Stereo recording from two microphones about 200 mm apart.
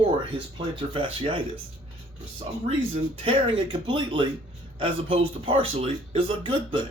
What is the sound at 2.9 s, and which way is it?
Speech, 25° right (ahead or behind).